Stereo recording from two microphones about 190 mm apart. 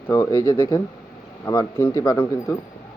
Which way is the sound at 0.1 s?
15° left (ahead or behind).